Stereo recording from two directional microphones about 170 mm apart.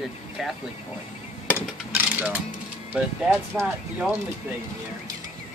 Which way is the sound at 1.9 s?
10° right (ahead or behind).